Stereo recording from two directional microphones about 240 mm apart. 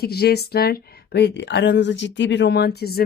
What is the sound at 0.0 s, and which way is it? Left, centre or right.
A woman's voice, left.